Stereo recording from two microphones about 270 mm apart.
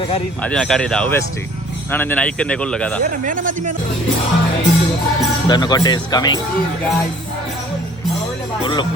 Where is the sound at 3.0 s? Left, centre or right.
Right.